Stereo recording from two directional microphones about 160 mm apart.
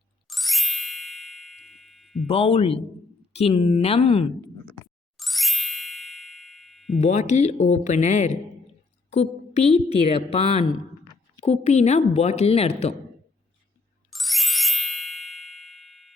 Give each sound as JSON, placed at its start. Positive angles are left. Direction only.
{"t": 0.3, "sound": "ding", "side_deg": 0}
{"t": 2.2, "sound": "a woman's voice", "side_deg": 40}
{"t": 5.1, "sound": "ding", "side_deg": 0}
{"t": 7.0, "sound": "a woman's voice", "side_deg": 45}
{"t": 14.1, "sound": "ding", "side_deg": 0}